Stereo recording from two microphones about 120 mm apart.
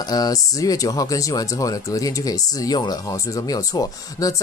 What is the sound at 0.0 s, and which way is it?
Speech, 30° left (ahead or behind).